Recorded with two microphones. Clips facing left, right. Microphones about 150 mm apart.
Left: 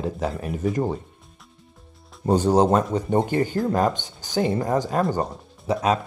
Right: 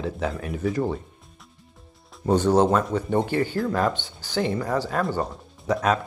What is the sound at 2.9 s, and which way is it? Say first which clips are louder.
Speech: left 2 dB; 35° left (ahead or behind).